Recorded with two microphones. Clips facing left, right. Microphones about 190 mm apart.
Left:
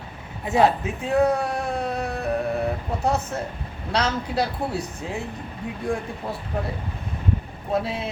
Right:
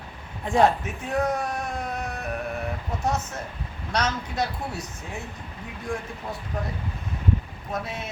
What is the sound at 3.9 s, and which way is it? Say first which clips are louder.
Speech: left 3 dB; 35° left (ahead or behind).